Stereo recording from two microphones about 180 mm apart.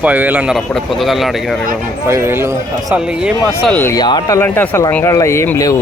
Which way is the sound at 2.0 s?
15° right (ahead or behind).